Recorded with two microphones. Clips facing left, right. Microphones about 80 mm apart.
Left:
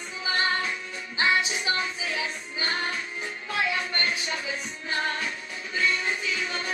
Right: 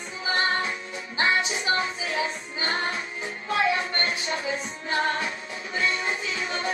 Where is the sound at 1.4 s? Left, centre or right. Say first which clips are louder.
Right 2 dB; right.